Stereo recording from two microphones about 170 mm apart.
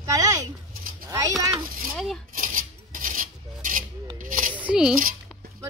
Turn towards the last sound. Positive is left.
turn(degrees=-5)  # may be behind; listen again after turning